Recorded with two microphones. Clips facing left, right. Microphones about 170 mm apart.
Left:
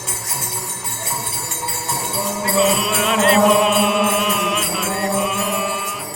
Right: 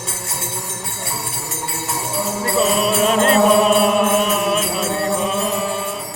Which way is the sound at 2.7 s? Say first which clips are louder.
Right 3 dB; 40° right (ahead or behind).